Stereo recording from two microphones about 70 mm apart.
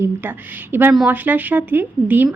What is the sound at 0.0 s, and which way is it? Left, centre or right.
A woman's voice, right.